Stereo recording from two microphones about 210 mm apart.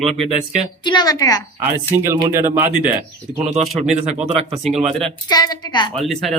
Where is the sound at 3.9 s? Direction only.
30° right (ahead or behind).